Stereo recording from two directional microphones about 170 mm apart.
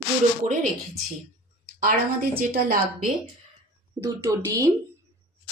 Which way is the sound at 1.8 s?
55° right (ahead or behind).